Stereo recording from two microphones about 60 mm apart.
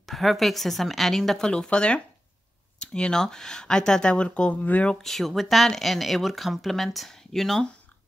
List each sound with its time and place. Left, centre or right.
0.0 s a woman's voice: centre; by 4.9 s left
5.0 s a woman's voice: centre